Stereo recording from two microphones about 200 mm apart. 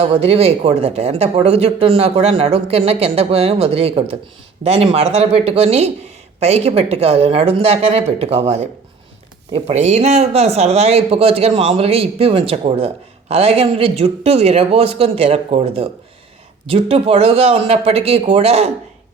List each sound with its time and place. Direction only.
0.0 s speech: 30° right (ahead or behind)